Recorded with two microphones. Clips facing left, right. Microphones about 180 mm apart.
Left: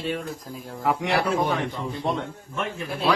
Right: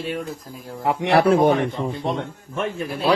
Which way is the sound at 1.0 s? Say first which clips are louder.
Right 11 dB; 60° right (ahead or behind).